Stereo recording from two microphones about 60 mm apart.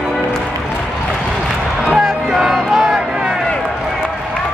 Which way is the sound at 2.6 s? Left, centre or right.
Centre.